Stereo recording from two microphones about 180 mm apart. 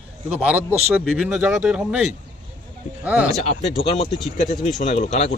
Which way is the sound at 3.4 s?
35° left (ahead or behind).